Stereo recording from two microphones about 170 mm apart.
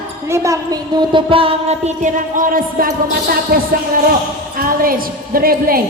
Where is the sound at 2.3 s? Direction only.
55° right (ahead or behind).